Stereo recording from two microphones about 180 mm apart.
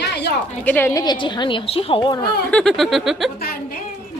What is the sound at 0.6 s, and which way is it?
A woman's voice, 10° left (ahead or behind).